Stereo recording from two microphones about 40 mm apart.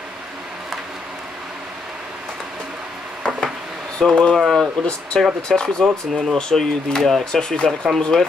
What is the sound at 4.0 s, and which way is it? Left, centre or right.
Speech, centre.